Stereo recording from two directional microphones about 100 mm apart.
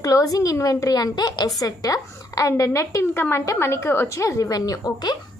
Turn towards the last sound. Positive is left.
turn(degrees=40)  # may be behind; listen again after turning